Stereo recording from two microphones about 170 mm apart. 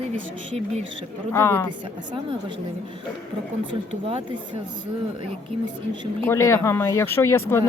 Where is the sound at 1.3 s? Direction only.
15° left (ahead or behind).